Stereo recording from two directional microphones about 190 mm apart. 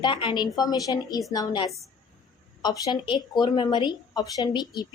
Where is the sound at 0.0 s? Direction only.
25° left (ahead or behind).